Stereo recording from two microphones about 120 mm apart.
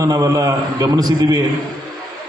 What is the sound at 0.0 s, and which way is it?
A man's voice, 30° right (ahead or behind).